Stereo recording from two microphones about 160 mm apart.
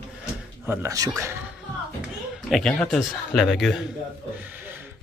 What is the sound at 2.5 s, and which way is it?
A man's voice, centre (ahead or behind).